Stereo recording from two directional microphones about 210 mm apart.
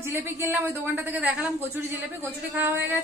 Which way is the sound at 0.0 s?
10° right (ahead or behind).